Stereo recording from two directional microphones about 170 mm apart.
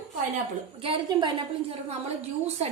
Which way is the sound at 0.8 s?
25° right (ahead or behind).